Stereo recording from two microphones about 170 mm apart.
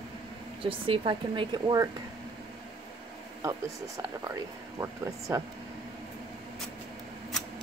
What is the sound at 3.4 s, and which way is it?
Speech, 15° right (ahead or behind).